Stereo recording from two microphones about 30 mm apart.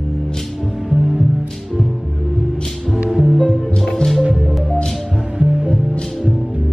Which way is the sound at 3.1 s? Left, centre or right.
Centre.